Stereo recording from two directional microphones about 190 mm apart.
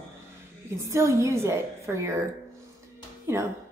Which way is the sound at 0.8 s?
15° right (ahead or behind).